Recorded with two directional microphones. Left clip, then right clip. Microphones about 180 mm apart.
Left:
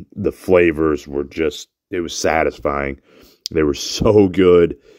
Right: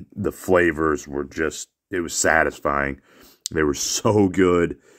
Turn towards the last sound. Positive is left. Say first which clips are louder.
# left 8 dB
turn(degrees=30)  # may be behind; listen again after turning